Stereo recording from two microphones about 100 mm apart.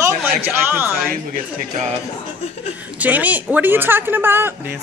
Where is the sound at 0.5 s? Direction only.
20° right (ahead or behind).